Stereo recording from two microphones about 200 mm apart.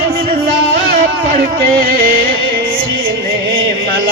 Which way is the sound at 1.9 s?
45° right (ahead or behind).